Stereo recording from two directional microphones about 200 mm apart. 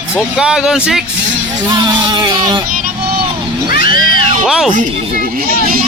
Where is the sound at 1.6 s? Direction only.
20° right (ahead or behind).